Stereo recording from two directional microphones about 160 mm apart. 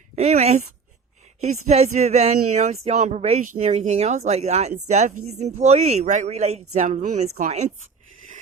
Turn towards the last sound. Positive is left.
turn(degrees=-45)  # may be behind; listen again after turning